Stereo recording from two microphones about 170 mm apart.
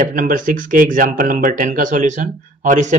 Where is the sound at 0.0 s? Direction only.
50° right (ahead or behind).